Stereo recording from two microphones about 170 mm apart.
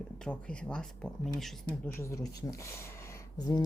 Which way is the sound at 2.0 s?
15° left (ahead or behind).